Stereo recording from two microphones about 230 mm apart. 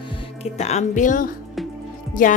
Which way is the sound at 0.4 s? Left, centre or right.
Left.